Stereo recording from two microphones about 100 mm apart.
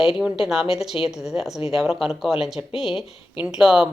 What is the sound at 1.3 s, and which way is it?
Speech, centre (ahead or behind).